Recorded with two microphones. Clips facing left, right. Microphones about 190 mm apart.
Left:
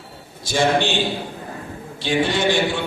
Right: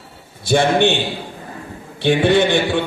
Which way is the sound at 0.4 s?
60° right (ahead or behind).